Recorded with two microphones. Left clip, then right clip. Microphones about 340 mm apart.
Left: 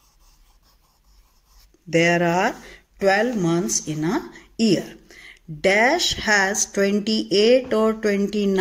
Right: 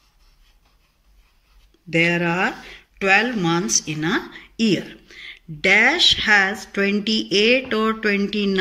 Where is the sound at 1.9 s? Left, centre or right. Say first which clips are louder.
Left 1 dB; left.